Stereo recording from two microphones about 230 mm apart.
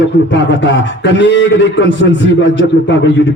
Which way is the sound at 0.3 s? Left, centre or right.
Left.